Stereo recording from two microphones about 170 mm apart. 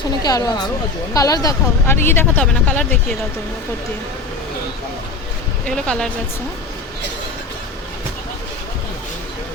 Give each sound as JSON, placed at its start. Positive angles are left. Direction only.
{"t": 0.2, "sound": "a woman's voice", "side_deg": 20}
{"t": 5.6, "sound": "a woman's voice", "side_deg": 5}